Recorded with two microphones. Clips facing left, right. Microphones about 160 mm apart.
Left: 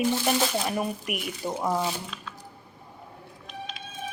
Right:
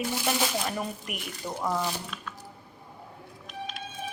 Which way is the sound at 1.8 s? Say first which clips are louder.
Left 2 dB; centre (ahead or behind).